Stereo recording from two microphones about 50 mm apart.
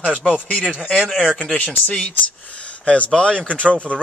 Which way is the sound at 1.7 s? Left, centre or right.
Left.